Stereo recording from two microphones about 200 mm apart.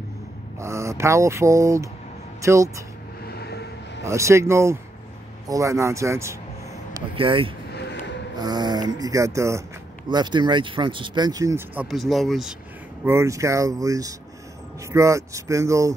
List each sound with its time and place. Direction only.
0.6 s speech: 15° right (ahead or behind)
3.3 s vehicle: 55° left (ahead or behind)
4.0 s speech: 15° right (ahead or behind)
6.9 s speech: 25° right (ahead or behind)
7.7 s a sound: 55° left (ahead or behind)
8.4 s speech: 20° right (ahead or behind); by 12.5 s centre (ahead or behind)
13.0 s speech: 15° right (ahead or behind)